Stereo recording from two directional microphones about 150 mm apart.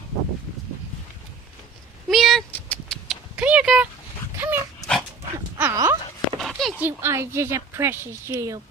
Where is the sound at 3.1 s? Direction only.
10° right (ahead or behind).